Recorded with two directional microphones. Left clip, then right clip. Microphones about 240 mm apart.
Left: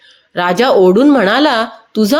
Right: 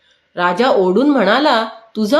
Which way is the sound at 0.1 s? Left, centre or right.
Left.